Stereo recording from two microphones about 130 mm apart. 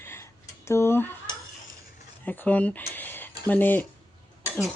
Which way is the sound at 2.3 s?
10° left (ahead or behind).